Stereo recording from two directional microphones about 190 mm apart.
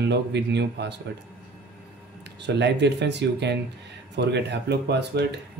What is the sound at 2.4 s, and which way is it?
Speech, 65° right (ahead or behind).